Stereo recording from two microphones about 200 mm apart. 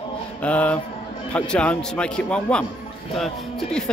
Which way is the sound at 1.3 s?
5° left (ahead or behind).